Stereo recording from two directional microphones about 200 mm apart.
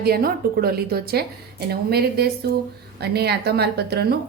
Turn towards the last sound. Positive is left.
turn(degrees=-55)  # may be behind; listen again after turning